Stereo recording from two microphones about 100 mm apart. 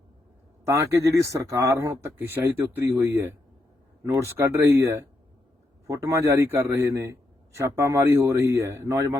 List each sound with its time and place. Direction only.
0.6 s a man's voice: 30° right (ahead or behind)